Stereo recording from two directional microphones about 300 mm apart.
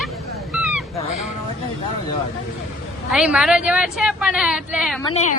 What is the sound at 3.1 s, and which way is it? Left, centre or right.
Speech, centre.